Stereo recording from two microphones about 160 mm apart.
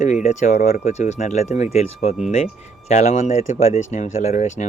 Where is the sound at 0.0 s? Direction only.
50° left (ahead or behind).